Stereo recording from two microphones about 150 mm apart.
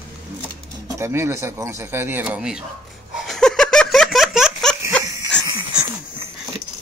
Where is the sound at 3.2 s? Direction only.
5° left (ahead or behind).